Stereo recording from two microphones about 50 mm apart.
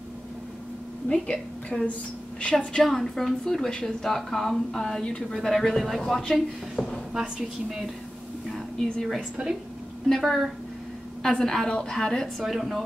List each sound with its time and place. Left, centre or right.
1.0 s a woman's voice: centre
6.8 s a sound: centre
7.2 s a woman's voice: centre
8.5 s a sound: centre
10.0 s a woman's voice: centre
12.4 s speech: centre